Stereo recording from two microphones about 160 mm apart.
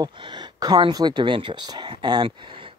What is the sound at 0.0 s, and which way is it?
Speech, 25° right (ahead or behind).